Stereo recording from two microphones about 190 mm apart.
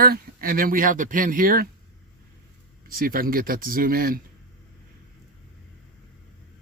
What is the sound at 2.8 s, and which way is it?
Speech, 50° right (ahead or behind).